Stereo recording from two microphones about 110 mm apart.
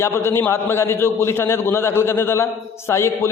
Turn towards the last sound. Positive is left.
turn(degrees=25)  # may be behind; listen again after turning